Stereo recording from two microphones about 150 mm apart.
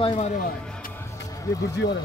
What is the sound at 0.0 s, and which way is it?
Speech, 35° left (ahead or behind).